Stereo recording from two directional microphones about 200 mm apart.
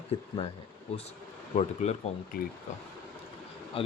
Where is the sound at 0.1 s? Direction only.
30° left (ahead or behind).